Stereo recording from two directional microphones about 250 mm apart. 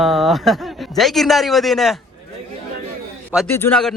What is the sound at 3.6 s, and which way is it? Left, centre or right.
Speech, centre.